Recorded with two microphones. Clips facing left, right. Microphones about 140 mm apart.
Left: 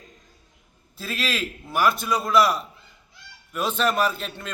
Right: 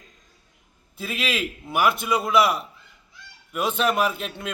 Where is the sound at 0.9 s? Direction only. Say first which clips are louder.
Right 1 dB; 15° right (ahead or behind).